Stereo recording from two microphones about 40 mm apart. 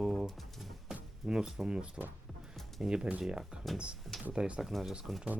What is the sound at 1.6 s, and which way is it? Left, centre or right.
Speech, right.